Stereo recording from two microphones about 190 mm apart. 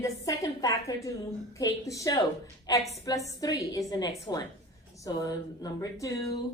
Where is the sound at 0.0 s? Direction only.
20° left (ahead or behind).